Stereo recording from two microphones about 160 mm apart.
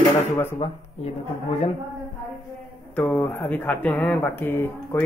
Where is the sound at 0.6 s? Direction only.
25° left (ahead or behind).